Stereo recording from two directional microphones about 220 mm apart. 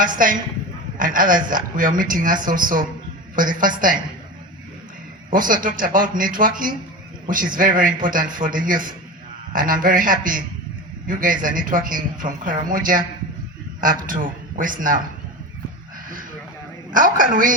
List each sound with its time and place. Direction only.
0.0 s speech: 40° right (ahead or behind)
5.3 s speech: 40° right (ahead or behind)
16.9 s speech: 40° right (ahead or behind)